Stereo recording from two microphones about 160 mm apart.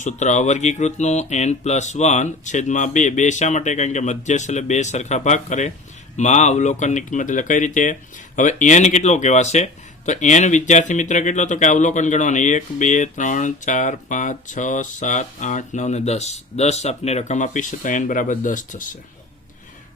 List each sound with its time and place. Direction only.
0.0 s speech: 50° left (ahead or behind)